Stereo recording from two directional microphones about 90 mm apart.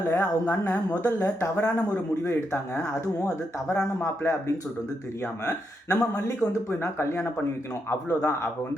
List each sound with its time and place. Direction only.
0.2 s speech: 20° left (ahead or behind)
5.9 s speech: 35° left (ahead or behind)